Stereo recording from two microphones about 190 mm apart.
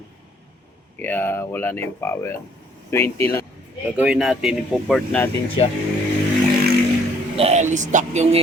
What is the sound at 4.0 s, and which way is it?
Speech, 5° right (ahead or behind).